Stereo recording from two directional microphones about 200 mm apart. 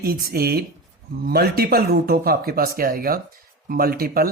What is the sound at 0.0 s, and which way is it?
Speech, 50° right (ahead or behind).